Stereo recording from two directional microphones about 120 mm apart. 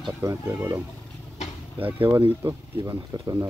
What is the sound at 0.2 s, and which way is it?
Speech, 20° right (ahead or behind).